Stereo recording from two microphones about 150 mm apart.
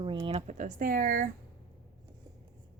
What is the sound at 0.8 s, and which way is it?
Speech, 70° right (ahead or behind).